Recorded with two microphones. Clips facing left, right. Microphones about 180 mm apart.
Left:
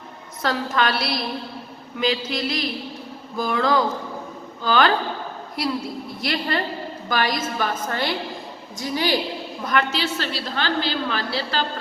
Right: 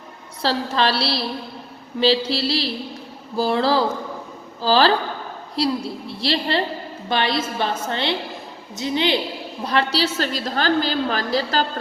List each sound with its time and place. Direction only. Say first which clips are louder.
0.4 s a woman's voice: right 2 dB; 30° right (ahead or behind)
9.6 s a woman's voice: right 2 dB; 35° right (ahead or behind)